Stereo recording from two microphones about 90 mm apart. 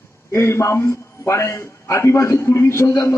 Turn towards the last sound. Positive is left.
turn(degrees=30)  # may be behind; listen again after turning